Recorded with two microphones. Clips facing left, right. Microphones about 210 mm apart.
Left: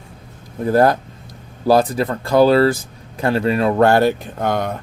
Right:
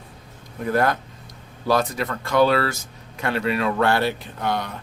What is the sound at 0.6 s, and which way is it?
Speech, 35° left (ahead or behind).